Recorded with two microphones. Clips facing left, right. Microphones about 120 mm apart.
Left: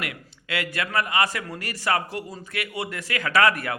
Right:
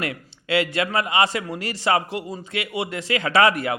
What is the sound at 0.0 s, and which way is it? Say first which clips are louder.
A man's voice: right 5 dB; 30° right (ahead or behind).